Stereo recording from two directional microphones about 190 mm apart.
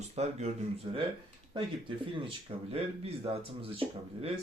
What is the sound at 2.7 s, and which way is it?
Speech, 30° right (ahead or behind).